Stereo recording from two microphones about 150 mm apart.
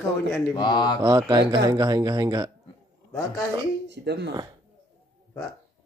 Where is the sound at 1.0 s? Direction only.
30° right (ahead or behind).